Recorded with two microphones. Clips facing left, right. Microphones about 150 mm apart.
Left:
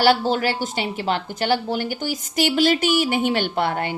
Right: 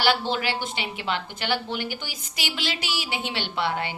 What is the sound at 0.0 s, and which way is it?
A woman's voice, 45° left (ahead or behind).